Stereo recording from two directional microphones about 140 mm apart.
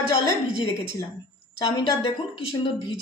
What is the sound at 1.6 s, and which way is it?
Speech, 30° left (ahead or behind).